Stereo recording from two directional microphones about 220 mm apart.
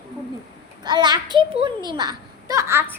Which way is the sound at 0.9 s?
20° right (ahead or behind).